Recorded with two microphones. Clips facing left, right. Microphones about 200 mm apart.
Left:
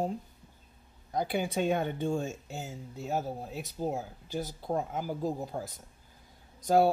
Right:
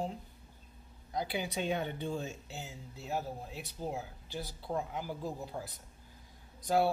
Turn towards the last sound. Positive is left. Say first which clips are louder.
# left 5 dB
turn(degrees=45)  # may be behind; listen again after turning